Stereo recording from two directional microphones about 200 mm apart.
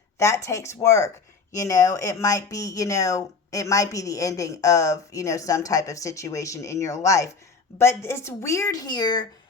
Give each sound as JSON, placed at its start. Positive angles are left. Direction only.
{"t": 0.2, "sound": "speech", "side_deg": 15}